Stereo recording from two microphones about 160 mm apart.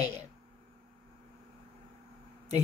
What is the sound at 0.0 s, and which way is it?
Speech, 45° right (ahead or behind).